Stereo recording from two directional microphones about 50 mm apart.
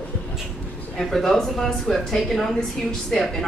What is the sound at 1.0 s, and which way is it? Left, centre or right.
A woman's voice, centre.